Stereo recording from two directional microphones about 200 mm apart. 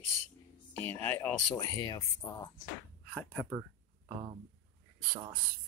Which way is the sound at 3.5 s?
20° right (ahead or behind).